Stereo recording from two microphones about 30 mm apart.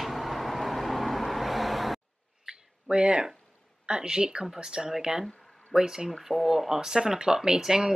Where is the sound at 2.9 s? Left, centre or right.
Right.